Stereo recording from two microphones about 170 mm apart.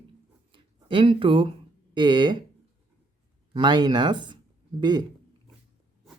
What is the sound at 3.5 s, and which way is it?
Speech, 25° right (ahead or behind).